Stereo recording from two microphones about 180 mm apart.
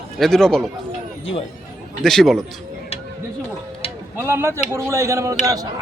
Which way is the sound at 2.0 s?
Centre (ahead or behind).